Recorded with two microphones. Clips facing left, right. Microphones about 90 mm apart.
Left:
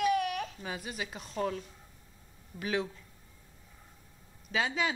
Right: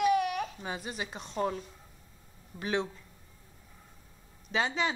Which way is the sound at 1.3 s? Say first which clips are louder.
Right 2 dB; 20° right (ahead or behind).